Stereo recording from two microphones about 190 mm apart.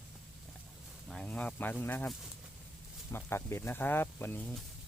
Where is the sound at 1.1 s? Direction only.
5° left (ahead or behind).